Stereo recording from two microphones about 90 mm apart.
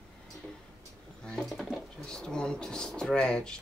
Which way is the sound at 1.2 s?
5° left (ahead or behind).